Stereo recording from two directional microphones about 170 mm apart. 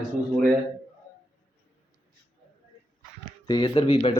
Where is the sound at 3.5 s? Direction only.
25° left (ahead or behind).